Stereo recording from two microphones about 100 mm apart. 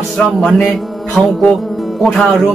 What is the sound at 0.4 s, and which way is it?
Speech, centre (ahead or behind).